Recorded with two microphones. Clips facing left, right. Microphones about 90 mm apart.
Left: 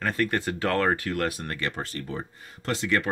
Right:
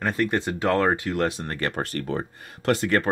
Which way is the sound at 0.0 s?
20° right (ahead or behind).